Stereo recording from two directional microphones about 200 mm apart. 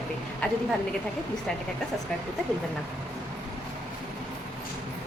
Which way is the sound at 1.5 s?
5° left (ahead or behind).